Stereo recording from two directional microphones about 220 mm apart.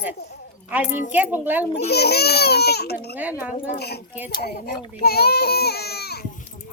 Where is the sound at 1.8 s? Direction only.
45° left (ahead or behind).